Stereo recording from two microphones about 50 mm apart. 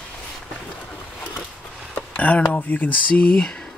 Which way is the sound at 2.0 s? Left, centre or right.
Left.